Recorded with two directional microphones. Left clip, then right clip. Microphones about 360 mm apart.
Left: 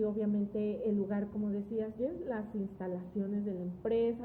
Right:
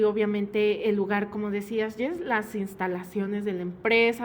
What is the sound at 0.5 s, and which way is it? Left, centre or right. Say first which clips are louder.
A woman's voice: right 12 dB; right.